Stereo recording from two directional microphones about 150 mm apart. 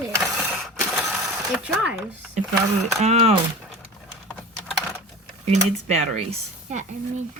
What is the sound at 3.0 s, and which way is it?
Speech, 45° right (ahead or behind).